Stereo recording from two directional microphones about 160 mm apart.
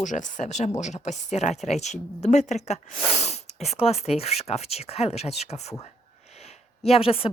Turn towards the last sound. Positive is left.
turn(degrees=35)  # may be behind; listen again after turning